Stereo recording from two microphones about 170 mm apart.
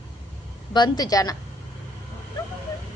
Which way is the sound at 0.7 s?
25° left (ahead or behind).